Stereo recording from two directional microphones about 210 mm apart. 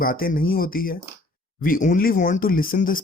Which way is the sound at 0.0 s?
45° left (ahead or behind).